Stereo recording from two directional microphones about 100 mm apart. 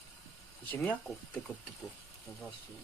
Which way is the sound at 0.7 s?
20° left (ahead or behind).